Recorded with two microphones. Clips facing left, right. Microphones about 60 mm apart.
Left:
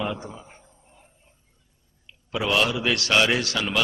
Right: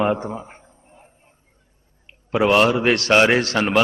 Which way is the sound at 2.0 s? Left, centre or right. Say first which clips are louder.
Right 8 dB; right.